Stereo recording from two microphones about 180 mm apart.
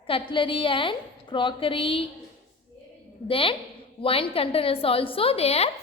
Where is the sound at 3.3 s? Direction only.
30° left (ahead or behind).